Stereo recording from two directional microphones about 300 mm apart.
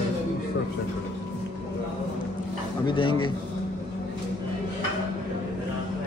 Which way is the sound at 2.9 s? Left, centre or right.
Centre.